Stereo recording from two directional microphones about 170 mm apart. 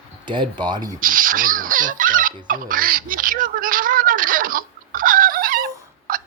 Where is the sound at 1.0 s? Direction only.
55° right (ahead or behind).